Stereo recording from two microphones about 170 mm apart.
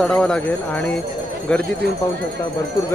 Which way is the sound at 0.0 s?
5° left (ahead or behind).